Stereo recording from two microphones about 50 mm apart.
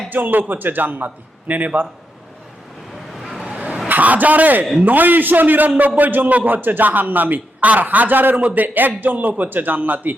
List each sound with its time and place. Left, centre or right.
0.1 s a man's voice: right
3.2 s vehicle: centre
3.5 s vehicle: right
3.8 s a man's voice: right